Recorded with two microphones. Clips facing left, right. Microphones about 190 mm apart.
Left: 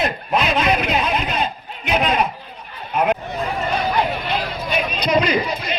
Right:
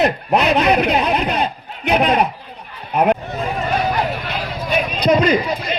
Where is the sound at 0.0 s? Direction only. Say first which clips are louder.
Right 4 dB; 65° right (ahead or behind).